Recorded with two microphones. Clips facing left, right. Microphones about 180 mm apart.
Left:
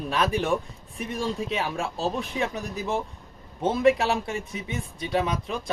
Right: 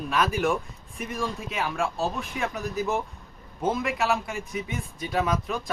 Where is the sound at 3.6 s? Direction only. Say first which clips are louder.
Left 5 dB; 30° left (ahead or behind).